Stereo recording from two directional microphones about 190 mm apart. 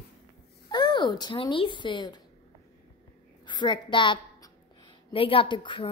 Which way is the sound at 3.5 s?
25° left (ahead or behind).